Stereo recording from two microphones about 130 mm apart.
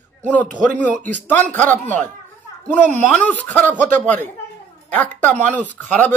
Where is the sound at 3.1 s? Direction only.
10° left (ahead or behind).